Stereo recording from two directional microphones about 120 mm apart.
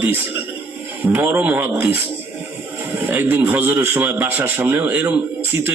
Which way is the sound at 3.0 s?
15° right (ahead or behind).